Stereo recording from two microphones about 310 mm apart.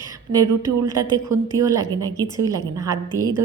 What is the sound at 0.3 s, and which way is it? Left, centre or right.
A woman's voice, centre.